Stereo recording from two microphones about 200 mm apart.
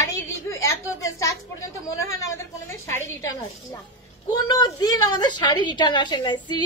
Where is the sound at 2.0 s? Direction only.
15° left (ahead or behind).